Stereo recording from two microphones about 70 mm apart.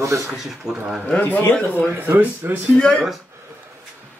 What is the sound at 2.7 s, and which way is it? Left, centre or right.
Speech, centre.